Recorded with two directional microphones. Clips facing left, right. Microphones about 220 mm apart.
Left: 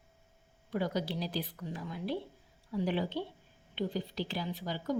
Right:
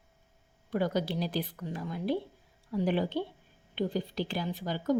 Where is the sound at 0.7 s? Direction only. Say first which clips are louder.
Right 4 dB; 55° right (ahead or behind).